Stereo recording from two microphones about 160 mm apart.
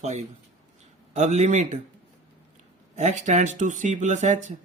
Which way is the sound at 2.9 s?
45° right (ahead or behind).